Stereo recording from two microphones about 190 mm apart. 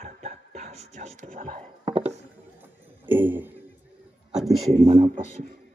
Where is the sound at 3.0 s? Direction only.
10° right (ahead or behind).